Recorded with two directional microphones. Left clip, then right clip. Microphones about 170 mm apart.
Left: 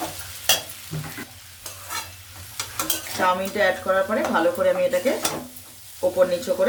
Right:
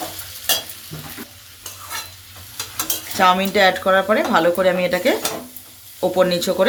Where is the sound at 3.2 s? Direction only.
90° right.